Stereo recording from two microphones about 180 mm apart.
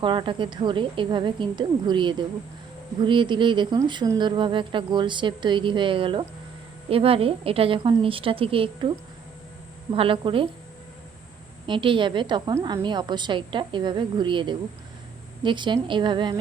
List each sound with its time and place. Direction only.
0.0 s a woman's voice: 25° right (ahead or behind)
9.9 s speech: 30° right (ahead or behind)
11.6 s speech: 30° right (ahead or behind)